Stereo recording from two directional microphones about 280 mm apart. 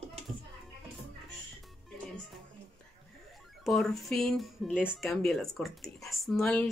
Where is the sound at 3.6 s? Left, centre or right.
Centre.